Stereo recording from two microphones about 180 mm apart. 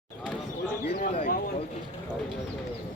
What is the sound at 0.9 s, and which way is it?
Speech, 35° left (ahead or behind).